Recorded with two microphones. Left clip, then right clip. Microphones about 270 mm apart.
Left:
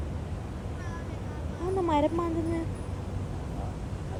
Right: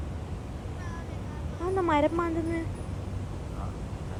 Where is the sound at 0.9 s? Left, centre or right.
Centre.